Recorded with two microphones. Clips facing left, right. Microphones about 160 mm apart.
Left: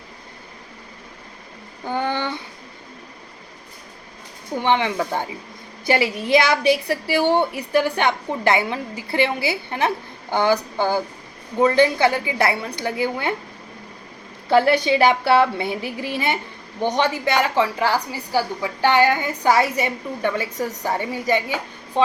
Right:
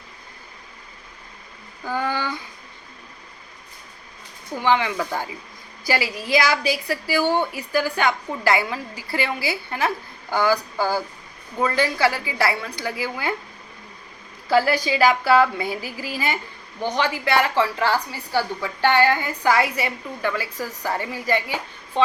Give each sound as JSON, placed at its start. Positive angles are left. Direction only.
{"t": 1.8, "sound": "a sound", "side_deg": 25}
{"t": 4.6, "sound": "a woman's voice", "side_deg": 25}
{"t": 14.5, "sound": "a woman's voice", "side_deg": 25}